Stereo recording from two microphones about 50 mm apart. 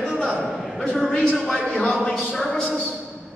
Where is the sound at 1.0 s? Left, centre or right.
Centre.